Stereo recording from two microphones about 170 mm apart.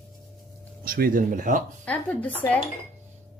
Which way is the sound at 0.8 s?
55° right (ahead or behind).